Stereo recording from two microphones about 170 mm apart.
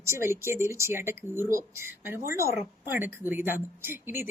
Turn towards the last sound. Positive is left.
turn(degrees=-10)  # may be behind; listen again after turning